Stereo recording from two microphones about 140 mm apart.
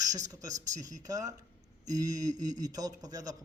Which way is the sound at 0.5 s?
60° right (ahead or behind).